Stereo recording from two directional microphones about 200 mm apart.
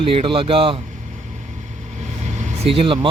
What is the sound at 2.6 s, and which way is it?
Speech, 25° right (ahead or behind).